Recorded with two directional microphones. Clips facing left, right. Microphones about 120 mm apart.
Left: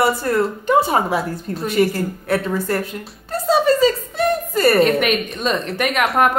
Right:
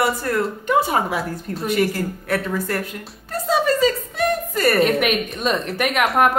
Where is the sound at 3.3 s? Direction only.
30° left (ahead or behind).